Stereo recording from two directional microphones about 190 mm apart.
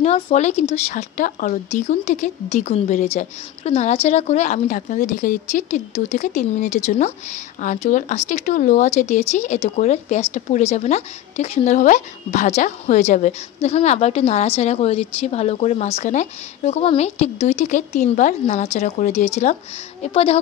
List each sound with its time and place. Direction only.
0.0 s speech: 35° left (ahead or behind)